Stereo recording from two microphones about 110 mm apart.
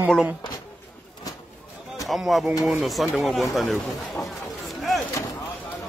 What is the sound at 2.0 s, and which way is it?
Speech, centre (ahead or behind).